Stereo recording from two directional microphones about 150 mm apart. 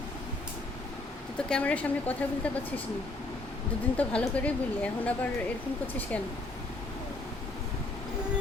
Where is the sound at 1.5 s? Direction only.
5° left (ahead or behind).